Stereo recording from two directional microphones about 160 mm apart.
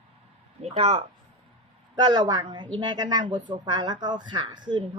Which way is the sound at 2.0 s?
25° right (ahead or behind).